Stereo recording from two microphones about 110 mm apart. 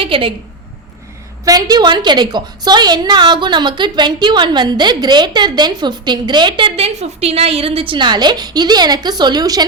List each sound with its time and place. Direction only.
0.0 s a woman's voice: 55° right (ahead or behind)
1.5 s a woman's voice: 35° right (ahead or behind)